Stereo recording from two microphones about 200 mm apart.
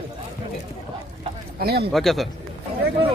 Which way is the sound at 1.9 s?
Centre (ahead or behind).